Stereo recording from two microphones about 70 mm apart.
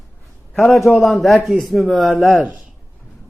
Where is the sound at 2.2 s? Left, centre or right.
Right.